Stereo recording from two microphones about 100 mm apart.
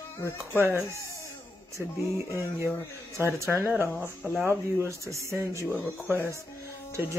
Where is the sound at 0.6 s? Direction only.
25° right (ahead or behind).